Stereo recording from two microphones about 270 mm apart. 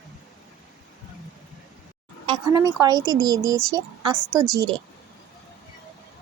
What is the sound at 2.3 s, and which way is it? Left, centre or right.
Speech, centre.